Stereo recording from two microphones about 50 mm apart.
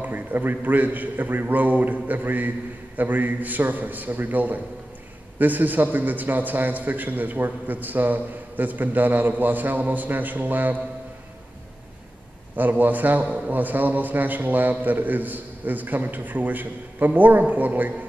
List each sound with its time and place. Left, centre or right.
0.0 s a man's voice: right
12.5 s a man's voice: right